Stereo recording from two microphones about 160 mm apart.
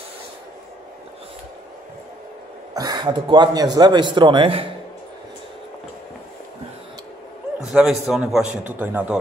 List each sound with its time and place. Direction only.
2.7 s a man's voice: 25° right (ahead or behind)
7.6 s a man's voice: centre (ahead or behind)